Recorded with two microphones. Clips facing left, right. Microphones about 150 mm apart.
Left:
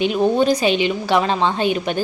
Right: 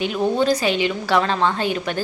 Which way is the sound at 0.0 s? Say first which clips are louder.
Left 3 dB; 20° left (ahead or behind).